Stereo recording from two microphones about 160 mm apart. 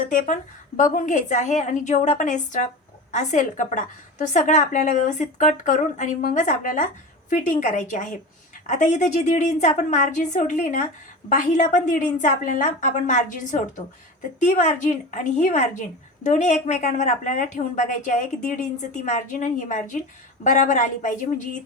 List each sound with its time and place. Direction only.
0.1 s a woman's voice: 50° left (ahead or behind)